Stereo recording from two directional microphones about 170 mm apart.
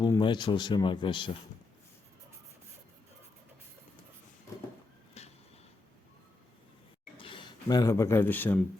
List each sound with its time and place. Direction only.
0.0 s speech: 25° left (ahead or behind)
5.2 s a sound: 40° left (ahead or behind)
7.2 s speech: 30° left (ahead or behind); by 8.5 s 10° left (ahead or behind)